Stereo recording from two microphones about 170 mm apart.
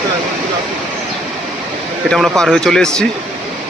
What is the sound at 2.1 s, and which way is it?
Speech, centre (ahead or behind).